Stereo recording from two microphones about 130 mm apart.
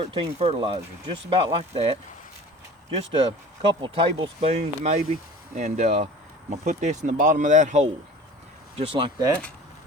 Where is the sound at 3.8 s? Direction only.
40° right (ahead or behind).